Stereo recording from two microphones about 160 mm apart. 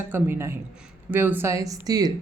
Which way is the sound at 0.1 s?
15° right (ahead or behind).